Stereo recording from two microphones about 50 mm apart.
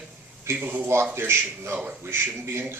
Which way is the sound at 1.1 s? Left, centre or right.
Right.